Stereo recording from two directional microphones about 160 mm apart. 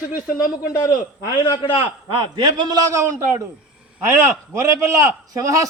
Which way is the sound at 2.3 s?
30° right (ahead or behind).